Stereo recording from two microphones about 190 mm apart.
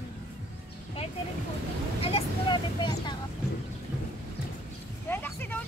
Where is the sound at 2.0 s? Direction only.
25° left (ahead or behind).